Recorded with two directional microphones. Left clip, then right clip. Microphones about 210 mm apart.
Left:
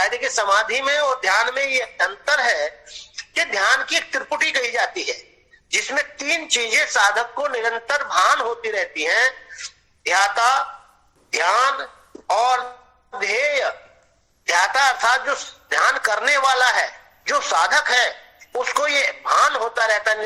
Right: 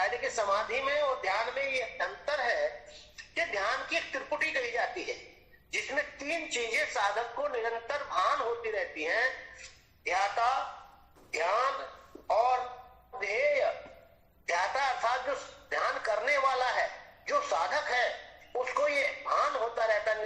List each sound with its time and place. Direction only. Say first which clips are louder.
0.0 s a man's voice: left 10 dB; 50° left (ahead or behind)